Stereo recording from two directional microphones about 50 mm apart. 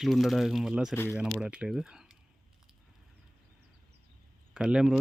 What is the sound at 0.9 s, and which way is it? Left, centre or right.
Speech, left.